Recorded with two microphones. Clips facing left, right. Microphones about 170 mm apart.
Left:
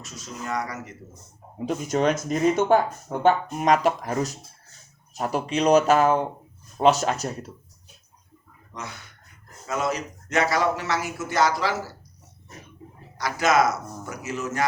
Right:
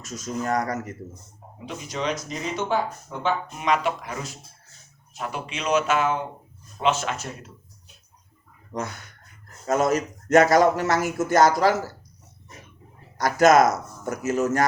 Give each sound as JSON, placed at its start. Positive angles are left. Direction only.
{"t": 0.0, "sound": "speech", "side_deg": -45}
{"t": 1.6, "sound": "speech", "side_deg": 50}
{"t": 8.7, "sound": "speech", "side_deg": -45}
{"t": 13.1, "sound": "speech", "side_deg": -45}